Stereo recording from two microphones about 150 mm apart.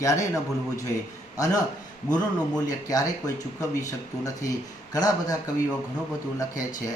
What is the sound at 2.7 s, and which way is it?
Speech, 25° left (ahead or behind).